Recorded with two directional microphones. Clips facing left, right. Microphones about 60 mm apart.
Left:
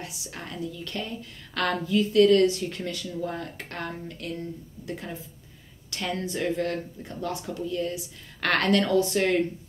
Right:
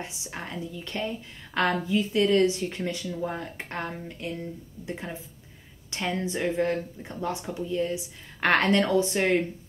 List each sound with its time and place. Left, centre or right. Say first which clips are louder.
0.0 s a woman's voice: right 2 dB; right